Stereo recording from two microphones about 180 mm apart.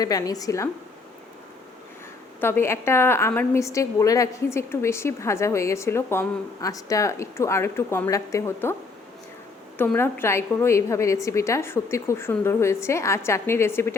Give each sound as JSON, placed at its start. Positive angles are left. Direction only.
{"t": 0.0, "sound": "a woman's voice", "side_deg": 20}
{"t": 2.4, "sound": "a woman's voice", "side_deg": 15}
{"t": 9.7, "sound": "a woman's voice", "side_deg": 10}